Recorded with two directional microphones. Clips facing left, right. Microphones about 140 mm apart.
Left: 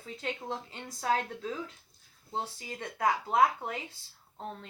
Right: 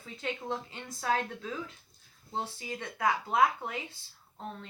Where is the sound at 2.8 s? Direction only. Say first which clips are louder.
Left 1 dB; 40° left (ahead or behind).